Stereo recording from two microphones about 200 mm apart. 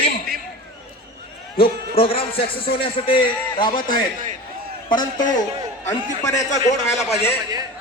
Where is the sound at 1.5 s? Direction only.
25° left (ahead or behind).